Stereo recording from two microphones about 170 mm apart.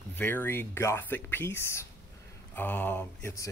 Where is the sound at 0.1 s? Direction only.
10° left (ahead or behind).